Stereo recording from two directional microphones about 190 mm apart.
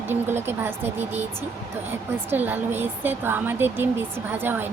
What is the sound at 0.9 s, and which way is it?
Speech, 35° right (ahead or behind).